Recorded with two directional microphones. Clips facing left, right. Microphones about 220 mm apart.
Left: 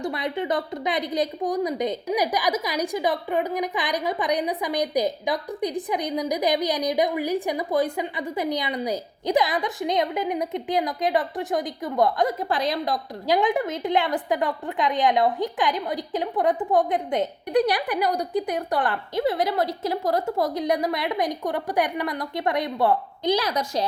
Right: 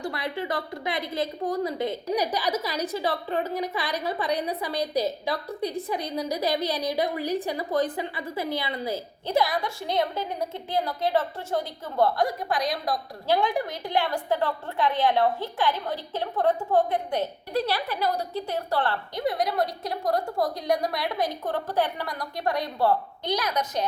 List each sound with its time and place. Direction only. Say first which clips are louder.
0.0 s a woman's voice: left 4 dB; 20° left (ahead or behind)